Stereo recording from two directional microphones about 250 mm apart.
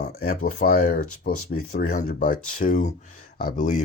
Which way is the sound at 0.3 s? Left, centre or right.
Left.